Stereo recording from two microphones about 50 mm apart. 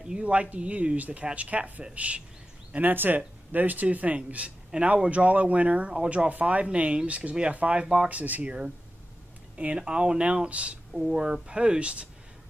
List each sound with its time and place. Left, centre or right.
0.0 s speech: right
2.7 s speech: right; by 8.1 s centre
8.1 s speech: right
9.6 s speech: right
10.9 s speech: centre